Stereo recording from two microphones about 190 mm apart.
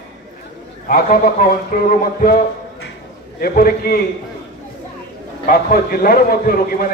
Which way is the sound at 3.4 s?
50° left (ahead or behind).